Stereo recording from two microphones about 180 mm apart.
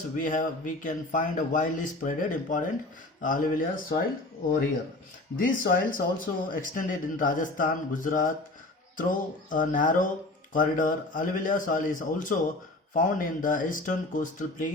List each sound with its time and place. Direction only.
0.2 s speech: 45° left (ahead or behind)
5.4 s speech: 50° left (ahead or behind)